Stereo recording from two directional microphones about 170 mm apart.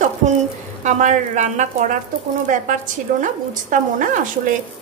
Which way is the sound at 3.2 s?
50° right (ahead or behind).